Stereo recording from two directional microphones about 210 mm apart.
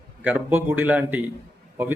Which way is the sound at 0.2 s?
10° right (ahead or behind).